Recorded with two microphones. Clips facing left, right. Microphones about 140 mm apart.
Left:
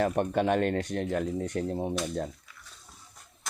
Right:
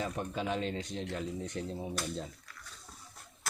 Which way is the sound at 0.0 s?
65° left (ahead or behind).